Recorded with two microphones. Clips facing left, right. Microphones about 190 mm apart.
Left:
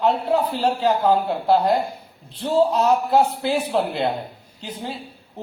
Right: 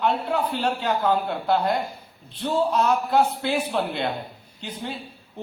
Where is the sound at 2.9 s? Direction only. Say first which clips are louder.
Left 3 dB; 35° left (ahead or behind).